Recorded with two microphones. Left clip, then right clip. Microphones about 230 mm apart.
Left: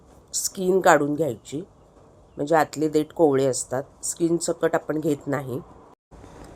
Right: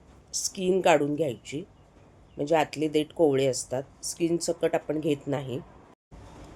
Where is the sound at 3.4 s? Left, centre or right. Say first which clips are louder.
Left 3 dB; centre.